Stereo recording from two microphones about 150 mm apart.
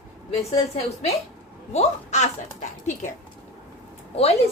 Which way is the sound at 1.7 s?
45° left (ahead or behind).